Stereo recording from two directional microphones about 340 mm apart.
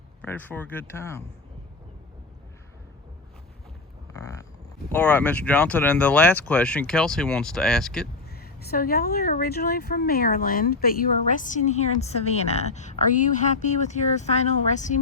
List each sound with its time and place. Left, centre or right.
0.2 s speech: centre
4.1 s vehicle: centre
4.9 s speech: centre
8.3 s speech: left